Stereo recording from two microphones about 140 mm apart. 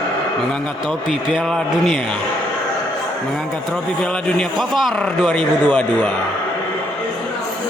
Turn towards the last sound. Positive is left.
turn(degrees=10)  # may be behind; listen again after turning